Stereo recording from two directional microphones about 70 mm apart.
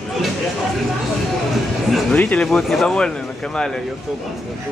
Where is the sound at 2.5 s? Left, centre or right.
Centre.